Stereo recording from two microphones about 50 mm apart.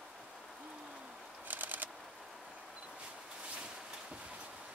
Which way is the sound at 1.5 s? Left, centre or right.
Right.